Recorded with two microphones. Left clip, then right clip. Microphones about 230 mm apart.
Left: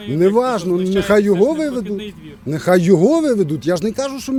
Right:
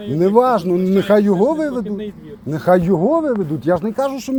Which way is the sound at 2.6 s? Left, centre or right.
Left.